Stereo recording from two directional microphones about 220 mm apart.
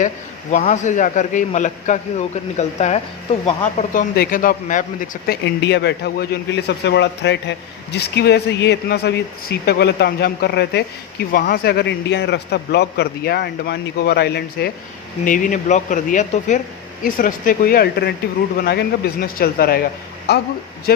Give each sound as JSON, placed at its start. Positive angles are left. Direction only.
{"t": 0.5, "sound": "a man's voice", "side_deg": 35}
{"t": 11.3, "sound": "a man's voice", "side_deg": 40}
{"t": 15.2, "sound": "a man's voice", "side_deg": 35}